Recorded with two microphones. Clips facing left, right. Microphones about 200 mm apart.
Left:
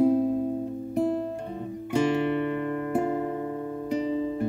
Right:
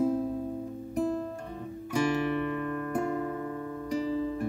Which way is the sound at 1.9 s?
25° left (ahead or behind).